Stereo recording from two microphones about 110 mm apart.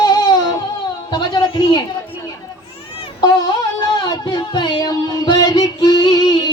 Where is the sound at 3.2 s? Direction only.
40° left (ahead or behind).